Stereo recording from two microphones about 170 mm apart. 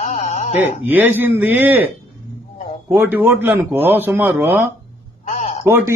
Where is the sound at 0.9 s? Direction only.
10° right (ahead or behind).